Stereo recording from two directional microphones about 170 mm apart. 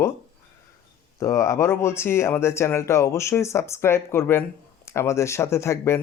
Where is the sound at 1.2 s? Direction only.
20° left (ahead or behind).